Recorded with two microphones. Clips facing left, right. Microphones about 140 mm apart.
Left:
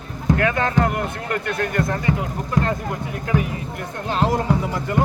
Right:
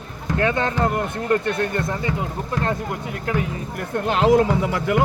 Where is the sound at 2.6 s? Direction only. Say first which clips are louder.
Left 3 dB; 20° left (ahead or behind).